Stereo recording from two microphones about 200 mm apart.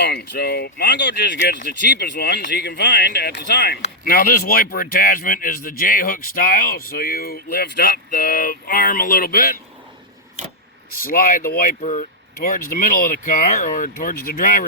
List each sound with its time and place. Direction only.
0.0 s speech: 55° left (ahead or behind)
11.0 s speech: 45° left (ahead or behind)